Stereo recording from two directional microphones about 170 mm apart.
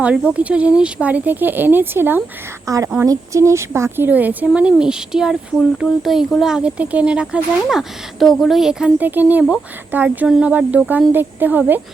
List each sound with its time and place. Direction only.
0.3 s a woman's voice: 10° right (ahead or behind)